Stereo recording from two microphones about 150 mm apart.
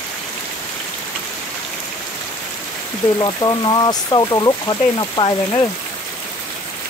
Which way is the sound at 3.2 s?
25° left (ahead or behind).